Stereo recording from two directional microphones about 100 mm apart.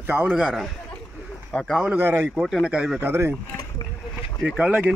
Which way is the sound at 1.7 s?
10° right (ahead or behind).